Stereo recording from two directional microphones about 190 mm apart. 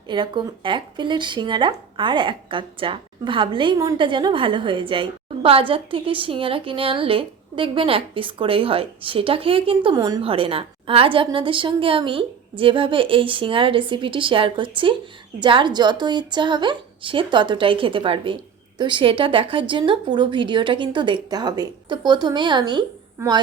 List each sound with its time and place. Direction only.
0.1 s speech: 25° right (ahead or behind)